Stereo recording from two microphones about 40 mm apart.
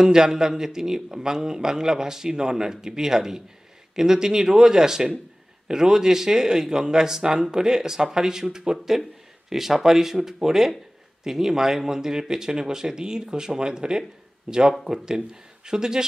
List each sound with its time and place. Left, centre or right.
0.0 s speech: centre